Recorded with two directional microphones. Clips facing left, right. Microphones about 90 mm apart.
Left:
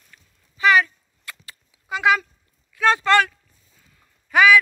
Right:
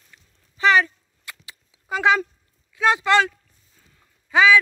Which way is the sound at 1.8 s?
35° right (ahead or behind).